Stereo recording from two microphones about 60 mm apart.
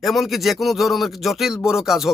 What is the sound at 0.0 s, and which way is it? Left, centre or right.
Speech, centre.